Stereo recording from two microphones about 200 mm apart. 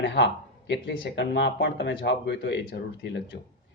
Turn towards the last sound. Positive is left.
turn(degrees=60)  # may be behind; listen again after turning